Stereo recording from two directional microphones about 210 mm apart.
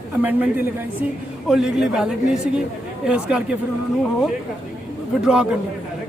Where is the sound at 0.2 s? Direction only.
10° right (ahead or behind).